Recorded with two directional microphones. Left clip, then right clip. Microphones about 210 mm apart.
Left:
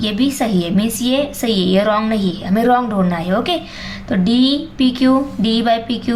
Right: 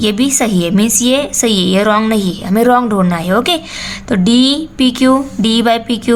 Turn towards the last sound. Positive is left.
turn(degrees=-30)  # may be behind; listen again after turning